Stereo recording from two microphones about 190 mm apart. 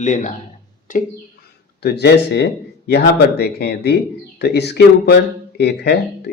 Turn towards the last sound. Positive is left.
turn(degrees=60)  # may be behind; listen again after turning